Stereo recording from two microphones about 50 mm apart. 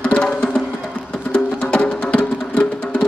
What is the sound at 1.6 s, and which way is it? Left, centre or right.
Music, left.